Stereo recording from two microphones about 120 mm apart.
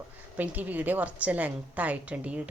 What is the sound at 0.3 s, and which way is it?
A woman's voice, 15° right (ahead or behind).